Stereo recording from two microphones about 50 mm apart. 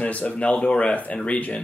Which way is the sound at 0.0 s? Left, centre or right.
Left.